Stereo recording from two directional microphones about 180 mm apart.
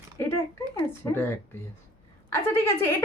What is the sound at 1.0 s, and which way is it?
Speech, 15° left (ahead or behind).